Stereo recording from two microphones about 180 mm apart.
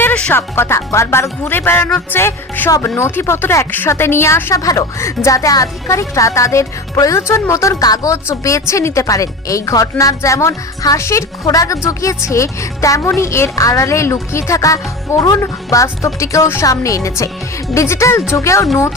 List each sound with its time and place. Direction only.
0.0 s speech: 10° left (ahead or behind)